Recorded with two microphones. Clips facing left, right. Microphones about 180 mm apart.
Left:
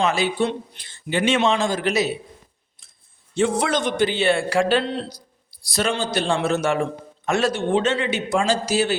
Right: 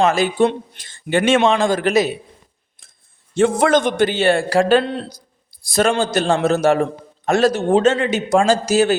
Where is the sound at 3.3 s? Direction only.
50° right (ahead or behind).